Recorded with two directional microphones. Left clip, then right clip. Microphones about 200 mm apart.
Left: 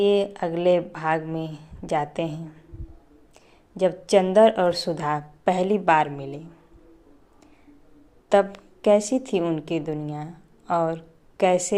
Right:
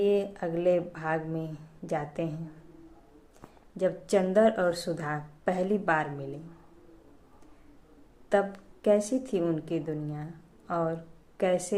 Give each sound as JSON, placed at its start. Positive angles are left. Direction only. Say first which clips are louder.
{"t": 0.0, "sound": "a woman's voice", "louder": "left 6 dB", "side_deg": 15}
{"t": 3.8, "sound": "a woman's voice", "louder": "left 7 dB", "side_deg": 15}
{"t": 8.3, "sound": "a woman's voice", "louder": "left 7 dB", "side_deg": 20}